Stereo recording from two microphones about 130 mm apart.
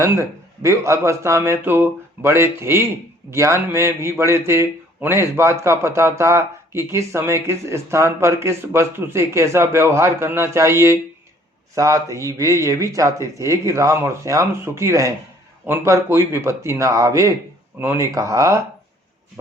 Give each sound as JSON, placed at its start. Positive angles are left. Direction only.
{"t": 0.0, "sound": "speech", "side_deg": -20}